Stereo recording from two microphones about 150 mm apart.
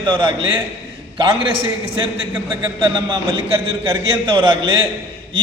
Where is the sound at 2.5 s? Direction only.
30° right (ahead or behind).